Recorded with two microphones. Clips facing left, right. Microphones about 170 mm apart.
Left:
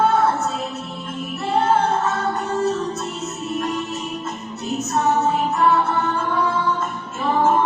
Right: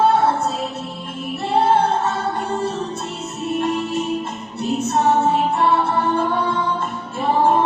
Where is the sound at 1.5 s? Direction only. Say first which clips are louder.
Right 2 dB; 30° right (ahead or behind).